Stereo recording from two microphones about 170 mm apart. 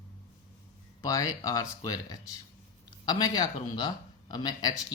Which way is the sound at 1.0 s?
20° left (ahead or behind).